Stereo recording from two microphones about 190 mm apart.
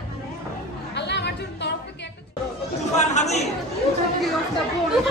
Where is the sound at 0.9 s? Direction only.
65° left (ahead or behind).